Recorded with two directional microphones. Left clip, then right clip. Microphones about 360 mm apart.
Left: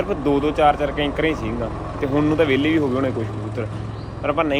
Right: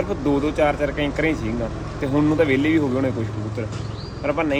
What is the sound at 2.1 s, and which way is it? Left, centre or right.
Speech, right.